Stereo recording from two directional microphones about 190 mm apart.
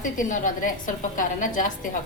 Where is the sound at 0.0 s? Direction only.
45° left (ahead or behind).